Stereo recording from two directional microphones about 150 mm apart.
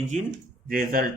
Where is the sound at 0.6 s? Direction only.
70° right (ahead or behind).